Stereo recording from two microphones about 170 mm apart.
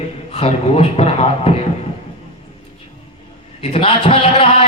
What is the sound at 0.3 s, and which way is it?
A man's voice, 35° left (ahead or behind).